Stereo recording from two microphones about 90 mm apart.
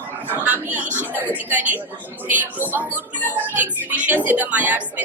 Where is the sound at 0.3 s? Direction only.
20° right (ahead or behind).